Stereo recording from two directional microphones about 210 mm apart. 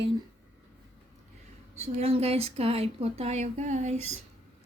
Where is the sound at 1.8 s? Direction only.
30° right (ahead or behind).